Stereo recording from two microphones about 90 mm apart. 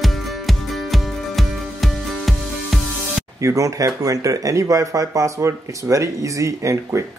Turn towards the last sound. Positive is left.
turn(degrees=-35)  # may be behind; listen again after turning